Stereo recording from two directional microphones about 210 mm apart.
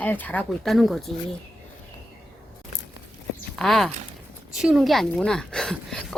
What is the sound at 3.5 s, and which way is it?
A woman's voice, centre (ahead or behind).